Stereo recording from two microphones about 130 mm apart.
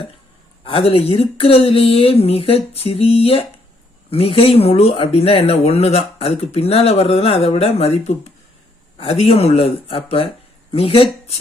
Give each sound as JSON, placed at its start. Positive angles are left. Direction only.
{"t": 0.6, "sound": "speech", "side_deg": 45}